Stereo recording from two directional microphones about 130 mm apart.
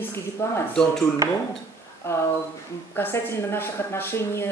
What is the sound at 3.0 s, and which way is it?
Speech, 20° left (ahead or behind).